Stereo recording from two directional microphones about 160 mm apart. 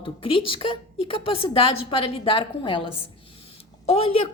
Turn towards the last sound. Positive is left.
turn(degrees=40)  # may be behind; listen again after turning